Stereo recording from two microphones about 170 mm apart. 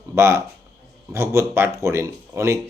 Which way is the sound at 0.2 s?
15° right (ahead or behind).